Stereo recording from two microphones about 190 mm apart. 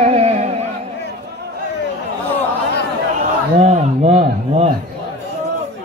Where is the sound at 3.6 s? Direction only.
35° right (ahead or behind).